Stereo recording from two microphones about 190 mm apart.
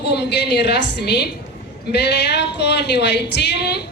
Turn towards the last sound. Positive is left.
turn(degrees=60)  # may be behind; listen again after turning